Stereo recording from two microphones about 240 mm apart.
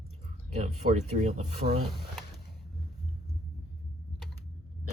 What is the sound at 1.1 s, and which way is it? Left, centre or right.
Speech, right.